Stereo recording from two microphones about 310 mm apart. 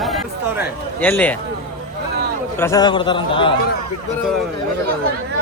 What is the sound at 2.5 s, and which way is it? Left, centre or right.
Speech, centre.